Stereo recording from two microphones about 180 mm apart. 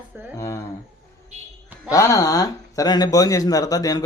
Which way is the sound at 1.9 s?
15° left (ahead or behind).